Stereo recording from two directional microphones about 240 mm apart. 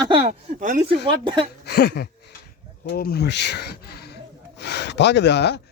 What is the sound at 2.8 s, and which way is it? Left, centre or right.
Speech, left.